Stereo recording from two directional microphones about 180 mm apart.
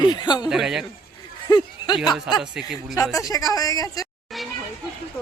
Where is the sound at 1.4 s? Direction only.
25° left (ahead or behind).